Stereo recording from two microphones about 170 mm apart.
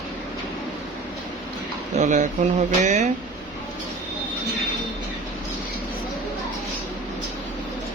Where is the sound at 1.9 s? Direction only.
45° right (ahead or behind).